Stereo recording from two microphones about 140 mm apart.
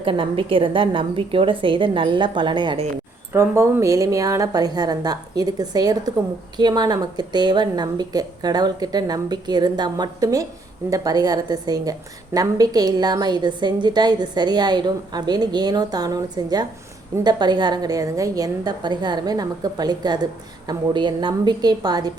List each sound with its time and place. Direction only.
0.0 s a woman's voice: 40° right (ahead or behind)
3.3 s a woman's voice: 20° right (ahead or behind)